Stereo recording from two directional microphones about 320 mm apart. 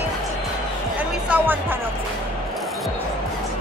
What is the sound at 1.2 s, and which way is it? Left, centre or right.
Music, centre.